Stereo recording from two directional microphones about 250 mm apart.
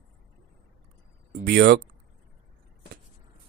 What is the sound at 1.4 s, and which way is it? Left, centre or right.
Speech, right.